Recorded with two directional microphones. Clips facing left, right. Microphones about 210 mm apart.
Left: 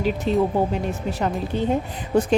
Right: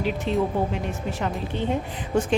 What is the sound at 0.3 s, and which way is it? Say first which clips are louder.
Speech: left 4 dB; 40° left (ahead or behind).